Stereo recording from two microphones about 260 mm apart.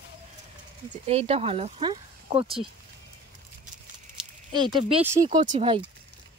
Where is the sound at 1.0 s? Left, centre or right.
Right.